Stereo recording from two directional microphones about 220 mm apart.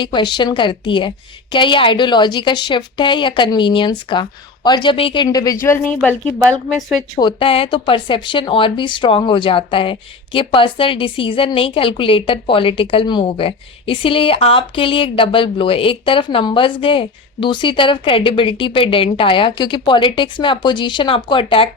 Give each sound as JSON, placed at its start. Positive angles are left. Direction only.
{"t": 0.0, "sound": "a woman's voice", "side_deg": 20}
{"t": 7.2, "sound": "speech", "side_deg": 20}